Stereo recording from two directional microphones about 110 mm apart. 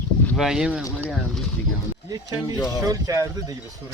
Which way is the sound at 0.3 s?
5° right (ahead or behind).